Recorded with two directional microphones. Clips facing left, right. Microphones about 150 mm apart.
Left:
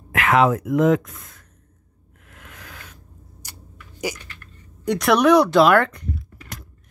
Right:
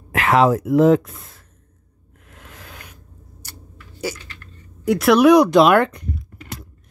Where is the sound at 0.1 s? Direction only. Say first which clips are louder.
Right 2 dB; 35° right (ahead or behind).